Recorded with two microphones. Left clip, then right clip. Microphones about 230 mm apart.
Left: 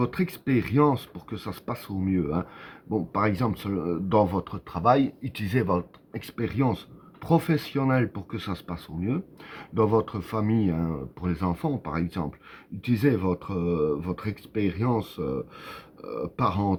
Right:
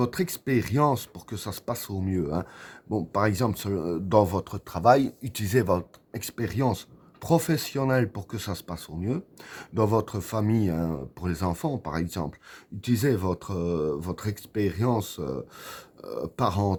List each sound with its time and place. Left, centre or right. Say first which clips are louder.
0.0 s speech: even; right